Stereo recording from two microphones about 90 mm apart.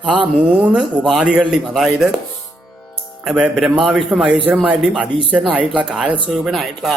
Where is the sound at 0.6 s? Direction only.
5° right (ahead or behind).